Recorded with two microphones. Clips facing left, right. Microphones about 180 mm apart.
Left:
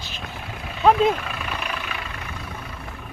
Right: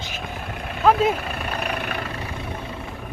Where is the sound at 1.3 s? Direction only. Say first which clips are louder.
Right 3 dB; 45° right (ahead or behind).